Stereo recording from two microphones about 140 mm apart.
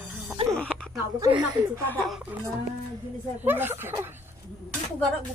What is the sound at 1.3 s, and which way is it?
Speech, 35° right (ahead or behind).